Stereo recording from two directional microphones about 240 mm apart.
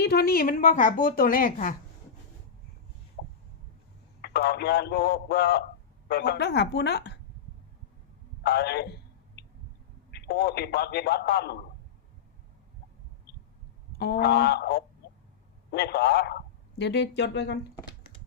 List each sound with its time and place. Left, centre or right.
0.0 s a woman's voice: left
3.2 s a sound: left
4.2 s a man's voice: left
8.4 s a sound: left
10.1 s a man's voice: left
14.0 s a man's voice: left